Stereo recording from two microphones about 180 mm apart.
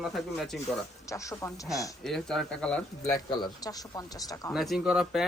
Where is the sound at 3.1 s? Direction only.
25° left (ahead or behind).